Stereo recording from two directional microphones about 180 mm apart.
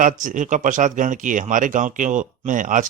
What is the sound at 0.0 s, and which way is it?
Speech, 45° right (ahead or behind).